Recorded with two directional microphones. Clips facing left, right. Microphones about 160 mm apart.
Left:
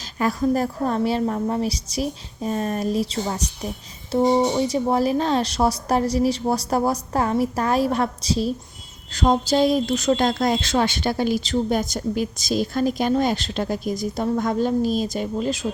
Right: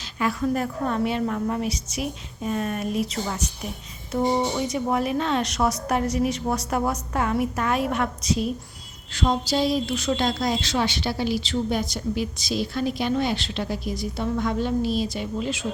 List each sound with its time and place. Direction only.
0.2 s speech: 40° left (ahead or behind)
9.1 s a woman's voice: 45° left (ahead or behind)